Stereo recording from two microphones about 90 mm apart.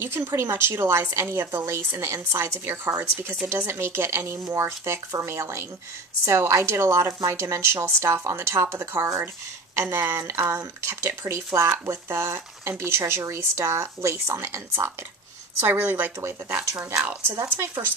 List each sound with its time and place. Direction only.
0.0 s speech: 25° right (ahead or behind)